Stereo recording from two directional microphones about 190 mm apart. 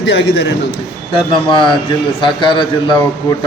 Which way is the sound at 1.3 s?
25° left (ahead or behind).